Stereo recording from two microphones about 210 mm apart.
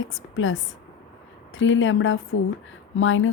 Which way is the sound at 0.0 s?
65° left (ahead or behind).